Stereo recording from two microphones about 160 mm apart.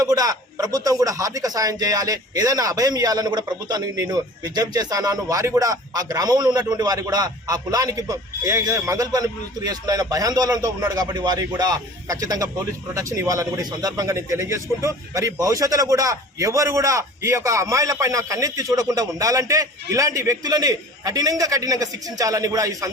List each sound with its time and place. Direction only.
0.0 s a man's voice: 25° right (ahead or behind)